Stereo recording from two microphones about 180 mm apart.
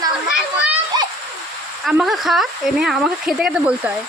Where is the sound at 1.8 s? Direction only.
Centre (ahead or behind).